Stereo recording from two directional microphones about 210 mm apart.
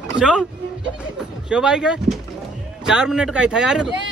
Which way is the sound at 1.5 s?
5° right (ahead or behind).